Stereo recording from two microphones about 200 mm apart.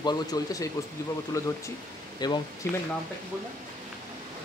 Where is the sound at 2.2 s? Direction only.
20° left (ahead or behind).